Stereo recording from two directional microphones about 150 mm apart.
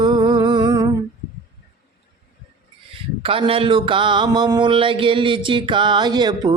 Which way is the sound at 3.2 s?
35° right (ahead or behind).